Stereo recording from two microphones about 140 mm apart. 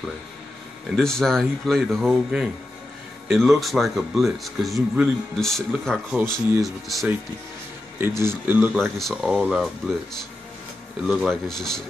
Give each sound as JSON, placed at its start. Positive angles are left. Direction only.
{"t": 0.8, "sound": "speech", "side_deg": 0}
{"t": 8.0, "sound": "speech", "side_deg": -20}
{"t": 8.7, "sound": "speech", "side_deg": 0}
{"t": 11.1, "sound": "speech", "side_deg": 0}